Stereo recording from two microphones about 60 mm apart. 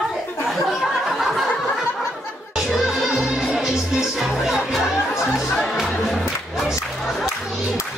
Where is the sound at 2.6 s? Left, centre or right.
Centre.